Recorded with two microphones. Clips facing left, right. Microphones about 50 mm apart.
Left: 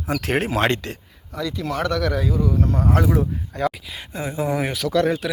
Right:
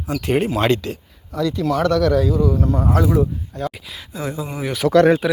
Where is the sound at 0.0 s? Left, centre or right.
Left.